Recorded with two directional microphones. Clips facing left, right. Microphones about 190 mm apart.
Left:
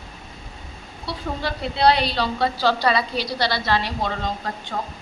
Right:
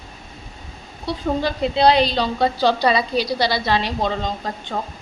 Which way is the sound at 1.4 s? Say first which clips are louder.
Right 2 dB; 20° right (ahead or behind).